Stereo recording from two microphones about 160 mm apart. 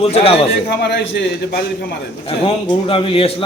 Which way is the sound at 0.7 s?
90° left.